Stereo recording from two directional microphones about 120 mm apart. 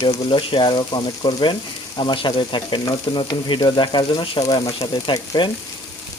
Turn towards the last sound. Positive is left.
turn(degrees=30)  # may be behind; listen again after turning